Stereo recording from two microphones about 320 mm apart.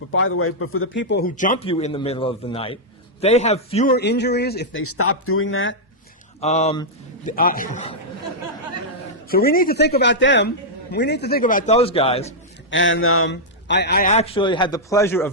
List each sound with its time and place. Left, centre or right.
0.1 s a man's voice: left
6.4 s a man's voice: centre
9.3 s a man's voice: left
12.7 s a man's voice: left; by 15.3 s centre